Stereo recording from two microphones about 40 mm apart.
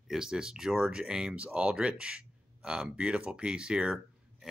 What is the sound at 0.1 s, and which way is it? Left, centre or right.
Speech, centre.